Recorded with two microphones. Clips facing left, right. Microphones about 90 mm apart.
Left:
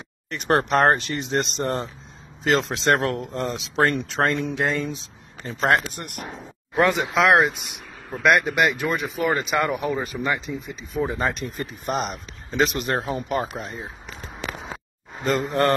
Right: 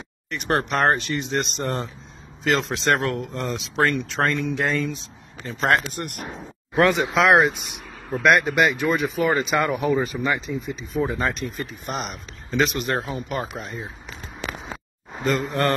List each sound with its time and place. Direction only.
0.3 s speech: 35° left (ahead or behind)
6.0 s speech: 10° left (ahead or behind)
11.1 s speech: 20° left (ahead or behind)
15.2 s speech: 30° left (ahead or behind)